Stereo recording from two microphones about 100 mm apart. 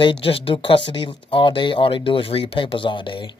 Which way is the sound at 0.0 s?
60° left (ahead or behind).